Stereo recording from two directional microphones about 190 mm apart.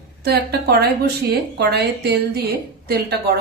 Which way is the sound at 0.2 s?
55° right (ahead or behind).